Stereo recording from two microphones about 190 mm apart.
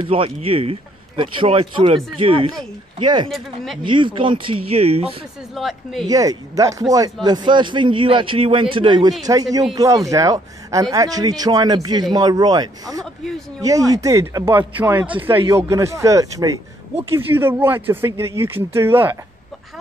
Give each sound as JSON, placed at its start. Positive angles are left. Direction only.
{"t": 0.0, "sound": "a man's voice", "side_deg": -30}
{"t": 3.3, "sound": "speech", "side_deg": 0}
{"t": 3.8, "sound": "a man's voice", "side_deg": -25}
{"t": 5.5, "sound": "speech", "side_deg": 0}
{"t": 6.0, "sound": "a man's voice", "side_deg": -20}
{"t": 13.0, "sound": "speech", "side_deg": 0}
{"t": 13.6, "sound": "speech", "side_deg": -20}